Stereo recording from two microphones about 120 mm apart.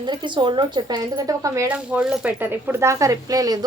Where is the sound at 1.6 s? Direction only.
10° right (ahead or behind).